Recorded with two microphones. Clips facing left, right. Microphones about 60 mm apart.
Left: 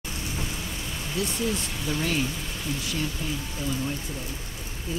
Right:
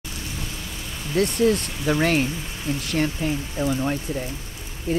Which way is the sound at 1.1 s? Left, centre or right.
Right.